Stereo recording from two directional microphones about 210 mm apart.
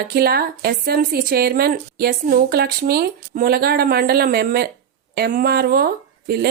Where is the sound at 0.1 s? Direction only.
45° right (ahead or behind).